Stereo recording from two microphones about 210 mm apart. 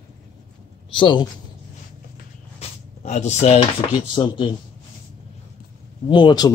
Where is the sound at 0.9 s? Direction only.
25° left (ahead or behind).